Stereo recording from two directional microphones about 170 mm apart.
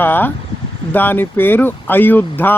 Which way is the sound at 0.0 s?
10° left (ahead or behind).